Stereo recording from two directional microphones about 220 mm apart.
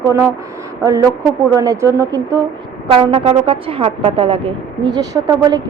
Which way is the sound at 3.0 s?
25° right (ahead or behind).